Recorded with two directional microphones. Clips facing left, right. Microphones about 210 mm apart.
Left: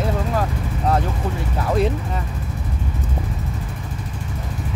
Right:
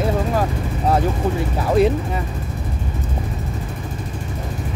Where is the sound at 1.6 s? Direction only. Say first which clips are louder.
Right 4 dB; 5° right (ahead or behind).